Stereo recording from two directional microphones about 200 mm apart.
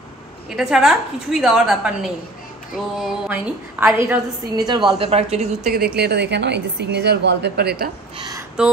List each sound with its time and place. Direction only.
0.5 s a woman's voice: centre (ahead or behind)
4.6 s a woman's voice: 25° right (ahead or behind)
5.9 s a woman's voice: 55° right (ahead or behind)
8.2 s a sound: 20° right (ahead or behind)